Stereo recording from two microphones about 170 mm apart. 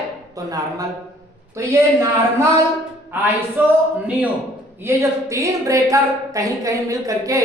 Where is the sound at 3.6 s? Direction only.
10° right (ahead or behind).